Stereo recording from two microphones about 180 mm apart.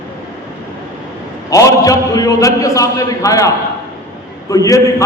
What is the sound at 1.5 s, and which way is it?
A man's voice, 20° left (ahead or behind).